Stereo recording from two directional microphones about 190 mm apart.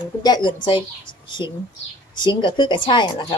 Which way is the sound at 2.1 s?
25° left (ahead or behind).